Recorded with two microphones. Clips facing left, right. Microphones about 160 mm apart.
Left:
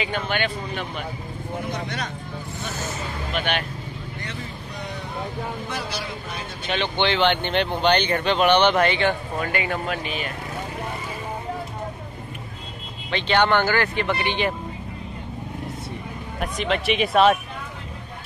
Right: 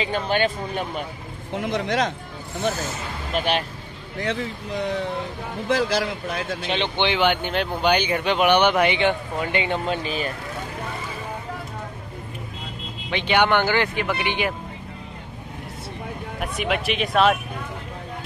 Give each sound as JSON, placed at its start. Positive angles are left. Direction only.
{"t": 0.0, "sound": "speech", "side_deg": -35}
{"t": 1.5, "sound": "speech", "side_deg": -90}
{"t": 3.3, "sound": "speech", "side_deg": -35}
{"t": 4.2, "sound": "speech", "side_deg": -90}
{"t": 6.7, "sound": "speech", "side_deg": -20}
{"t": 13.1, "sound": "speech", "side_deg": -10}
{"t": 16.3, "sound": "speech", "side_deg": -5}